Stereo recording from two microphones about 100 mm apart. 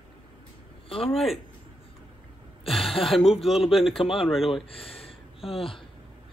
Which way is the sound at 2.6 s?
Centre (ahead or behind).